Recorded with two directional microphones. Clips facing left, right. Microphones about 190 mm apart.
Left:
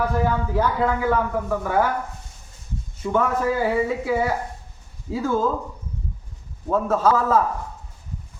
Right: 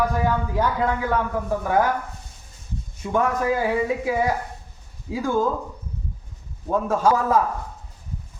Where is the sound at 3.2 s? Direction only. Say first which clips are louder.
Even; 15° right (ahead or behind).